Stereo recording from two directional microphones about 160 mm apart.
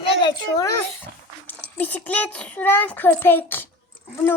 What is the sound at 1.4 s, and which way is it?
A child's voice, 10° left (ahead or behind).